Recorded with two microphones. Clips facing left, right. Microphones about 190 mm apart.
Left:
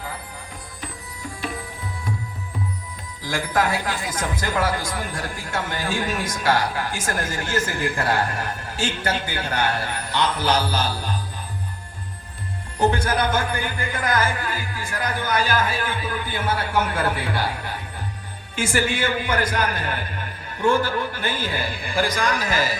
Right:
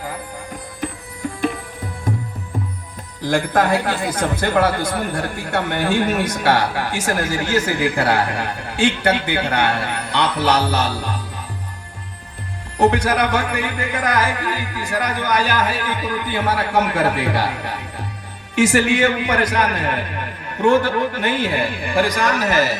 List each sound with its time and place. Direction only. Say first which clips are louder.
3.2 s speech: right 6 dB; 55° right (ahead or behind)
12.8 s music: right 4 dB; 70° right (ahead or behind)